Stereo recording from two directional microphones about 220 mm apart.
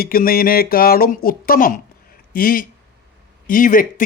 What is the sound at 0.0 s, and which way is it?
Speech, 40° left (ahead or behind).